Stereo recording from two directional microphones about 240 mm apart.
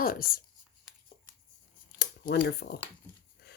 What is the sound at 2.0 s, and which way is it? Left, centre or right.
Speech, left.